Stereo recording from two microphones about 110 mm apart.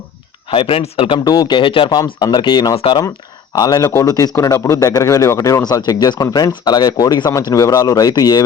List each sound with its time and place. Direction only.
0.5 s speech: 55° left (ahead or behind)
1.2 s speech: 35° left (ahead or behind)
2.0 s speech: 40° left (ahead or behind)
2.7 s speech: 55° left (ahead or behind)
3.6 s speech: 35° left (ahead or behind)